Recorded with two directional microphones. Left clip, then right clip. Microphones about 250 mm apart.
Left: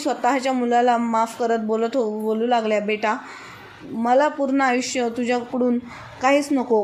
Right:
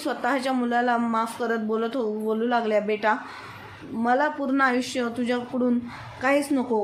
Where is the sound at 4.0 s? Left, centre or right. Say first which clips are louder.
Left 5 dB; centre.